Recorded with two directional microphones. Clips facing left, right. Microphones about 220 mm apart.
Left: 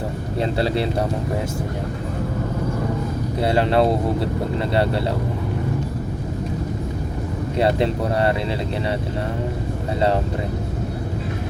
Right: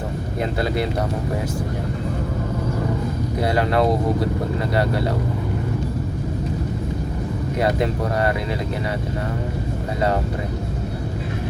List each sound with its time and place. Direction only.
3.4 s speech: 25° left (ahead or behind)
7.6 s speech: 25° left (ahead or behind)